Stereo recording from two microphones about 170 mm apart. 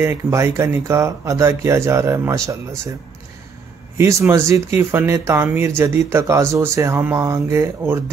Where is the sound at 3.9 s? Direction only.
15° right (ahead or behind).